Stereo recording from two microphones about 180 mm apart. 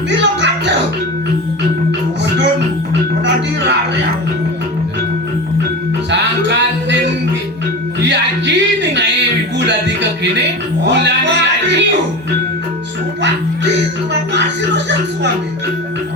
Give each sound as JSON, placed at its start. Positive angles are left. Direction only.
{"t": 0.2, "sound": "music", "side_deg": -80}
{"t": 3.2, "sound": "music", "side_deg": -80}
{"t": 6.1, "sound": "music", "side_deg": -80}
{"t": 8.0, "sound": "music", "side_deg": -80}